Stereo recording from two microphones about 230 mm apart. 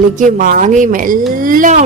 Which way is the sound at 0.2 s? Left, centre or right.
Right.